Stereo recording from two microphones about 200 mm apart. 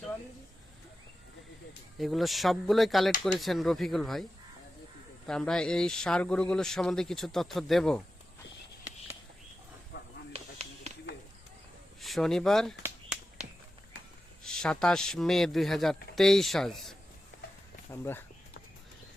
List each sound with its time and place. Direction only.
2.0 s a man's voice: centre (ahead or behind)
9.9 s a sound: 55° left (ahead or behind)
10.3 s a sound: 30° right (ahead or behind)
11.9 s speech: centre (ahead or behind)
12.8 s finger snapping: 5° right (ahead or behind)
14.4 s a man's voice: 5° left (ahead or behind)
18.0 s speech: 10° left (ahead or behind)